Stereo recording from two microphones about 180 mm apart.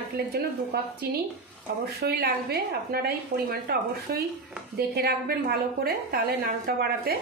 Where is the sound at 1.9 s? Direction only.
60° right (ahead or behind).